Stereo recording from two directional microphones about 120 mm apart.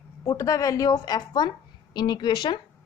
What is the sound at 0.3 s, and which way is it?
A woman's voice, 25° left (ahead or behind).